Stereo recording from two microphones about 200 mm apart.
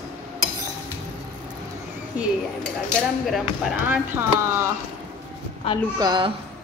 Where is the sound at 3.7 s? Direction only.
10° right (ahead or behind).